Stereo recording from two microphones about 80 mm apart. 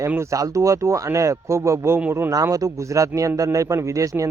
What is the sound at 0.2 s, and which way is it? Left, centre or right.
Speech, right.